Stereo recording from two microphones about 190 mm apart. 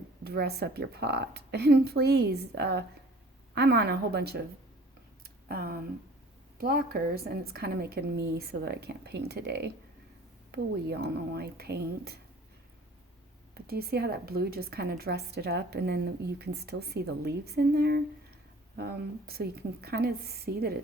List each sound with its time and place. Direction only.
0.3 s a woman's voice: 55° right (ahead or behind)
5.2 s a sound: 50° right (ahead or behind)
6.6 s a woman's voice: 50° right (ahead or behind)
13.5 s a woman's voice: 55° right (ahead or behind)